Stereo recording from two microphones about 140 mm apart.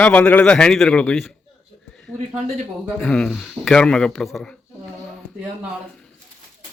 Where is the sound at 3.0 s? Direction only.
5° left (ahead or behind).